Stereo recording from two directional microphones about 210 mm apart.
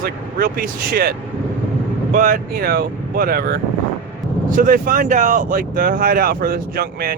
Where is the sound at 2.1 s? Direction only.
40° right (ahead or behind).